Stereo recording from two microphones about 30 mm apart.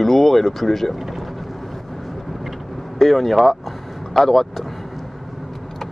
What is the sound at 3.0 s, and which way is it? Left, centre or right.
Speech, centre.